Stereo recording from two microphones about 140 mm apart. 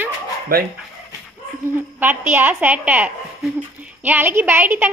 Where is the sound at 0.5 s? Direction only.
90° right.